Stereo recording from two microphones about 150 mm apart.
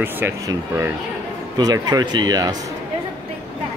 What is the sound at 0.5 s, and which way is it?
Speech, 15° right (ahead or behind).